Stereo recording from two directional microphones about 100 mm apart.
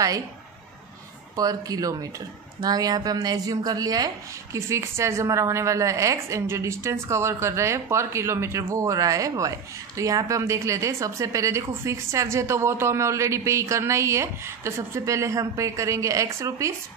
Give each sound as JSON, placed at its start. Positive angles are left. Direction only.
{"t": 1.3, "sound": "a woman's voice", "side_deg": -40}